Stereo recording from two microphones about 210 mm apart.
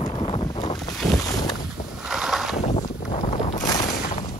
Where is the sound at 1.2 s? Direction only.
20° left (ahead or behind).